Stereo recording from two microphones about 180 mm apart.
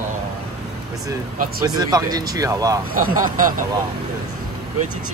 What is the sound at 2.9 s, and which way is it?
Speech, 50° right (ahead or behind).